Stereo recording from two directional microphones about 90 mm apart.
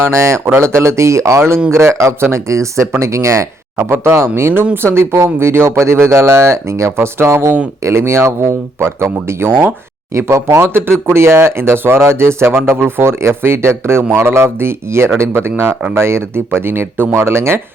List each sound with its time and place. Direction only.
0.0 s speech: 30° right (ahead or behind)